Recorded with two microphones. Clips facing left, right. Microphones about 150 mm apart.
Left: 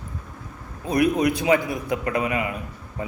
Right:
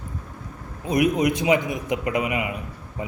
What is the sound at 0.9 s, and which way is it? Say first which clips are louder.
Speech: even; 15° right (ahead or behind).